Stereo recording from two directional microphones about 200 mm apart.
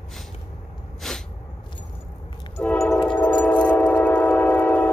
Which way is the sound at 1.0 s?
Centre (ahead or behind).